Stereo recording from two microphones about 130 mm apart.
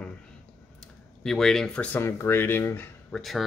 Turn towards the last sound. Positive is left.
turn(degrees=0)  # may be behind; listen again after turning